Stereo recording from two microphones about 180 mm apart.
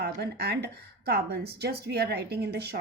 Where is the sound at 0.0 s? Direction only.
65° right (ahead or behind).